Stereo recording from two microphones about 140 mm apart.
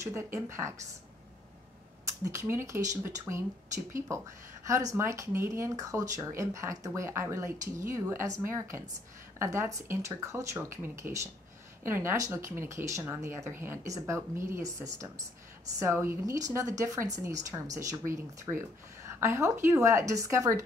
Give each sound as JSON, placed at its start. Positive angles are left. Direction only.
{"t": 0.0, "sound": "speech", "side_deg": -20}
{"t": 2.0, "sound": "speech", "side_deg": -20}
{"t": 4.1, "sound": "speech", "side_deg": -20}